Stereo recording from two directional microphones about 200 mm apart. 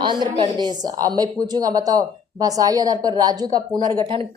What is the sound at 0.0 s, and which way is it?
A woman's voice, 25° right (ahead or behind).